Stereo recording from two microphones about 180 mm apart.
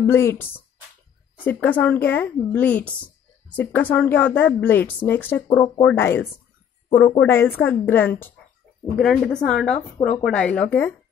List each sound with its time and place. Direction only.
0.0 s a woman's voice: 15° left (ahead or behind)